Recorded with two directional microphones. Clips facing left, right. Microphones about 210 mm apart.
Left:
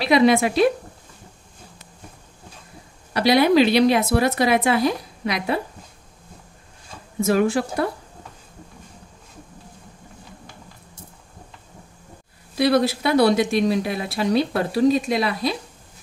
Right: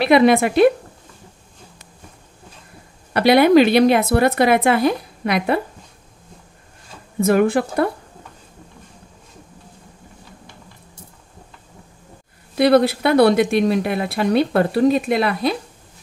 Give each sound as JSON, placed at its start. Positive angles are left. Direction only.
{"t": 0.0, "sound": "speech", "side_deg": -55}
{"t": 3.1, "sound": "speech", "side_deg": -55}
{"t": 7.2, "sound": "speech", "side_deg": -55}
{"t": 12.5, "sound": "speech", "side_deg": -60}